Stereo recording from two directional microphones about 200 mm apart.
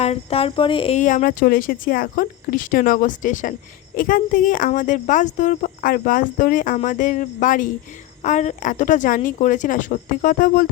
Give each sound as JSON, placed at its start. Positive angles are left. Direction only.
{"t": 0.0, "sound": "speech", "side_deg": 30}